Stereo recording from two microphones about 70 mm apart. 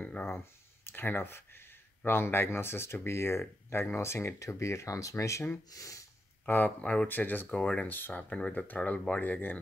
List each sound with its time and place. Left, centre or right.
0.0 s a sound: centre
0.8 s speech: left
6.4 s speech: left
7.5 s speech: centre
7.9 s speech: left